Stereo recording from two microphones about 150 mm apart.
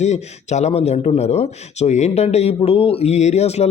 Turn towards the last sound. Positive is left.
turn(degrees=45)  # may be behind; listen again after turning